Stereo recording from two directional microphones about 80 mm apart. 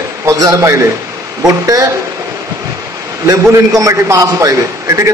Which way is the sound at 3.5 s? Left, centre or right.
Right.